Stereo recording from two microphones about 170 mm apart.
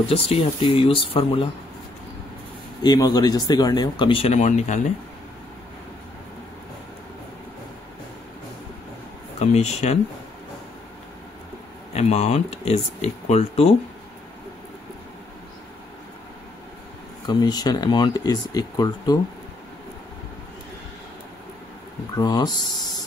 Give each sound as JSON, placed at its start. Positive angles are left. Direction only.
{"t": 0.1, "sound": "speech", "side_deg": 35}
{"t": 2.8, "sound": "speech", "side_deg": 25}
{"t": 9.4, "sound": "speech", "side_deg": 40}
{"t": 11.9, "sound": "speech", "side_deg": 40}
{"t": 17.3, "sound": "speech", "side_deg": 25}
{"t": 22.1, "sound": "speech", "side_deg": 25}